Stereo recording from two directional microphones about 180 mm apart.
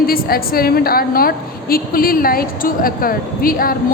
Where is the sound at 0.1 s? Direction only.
55° left (ahead or behind).